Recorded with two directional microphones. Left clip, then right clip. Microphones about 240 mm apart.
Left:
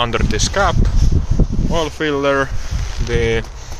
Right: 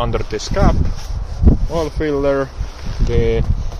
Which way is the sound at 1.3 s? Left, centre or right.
Right.